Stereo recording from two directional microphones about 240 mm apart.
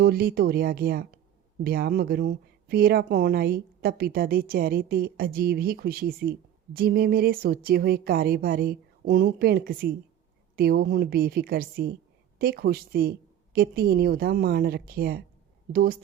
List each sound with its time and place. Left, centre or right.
0.0 s speech: right